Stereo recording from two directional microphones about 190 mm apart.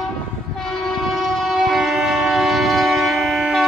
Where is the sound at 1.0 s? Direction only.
Centre (ahead or behind).